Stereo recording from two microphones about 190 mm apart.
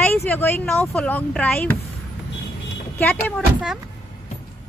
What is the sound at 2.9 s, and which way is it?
Vehicle, 10° left (ahead or behind).